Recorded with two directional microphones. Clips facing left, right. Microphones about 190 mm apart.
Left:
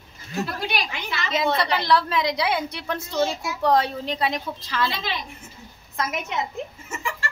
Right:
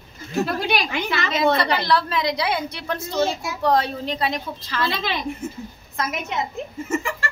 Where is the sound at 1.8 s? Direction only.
15° left (ahead or behind).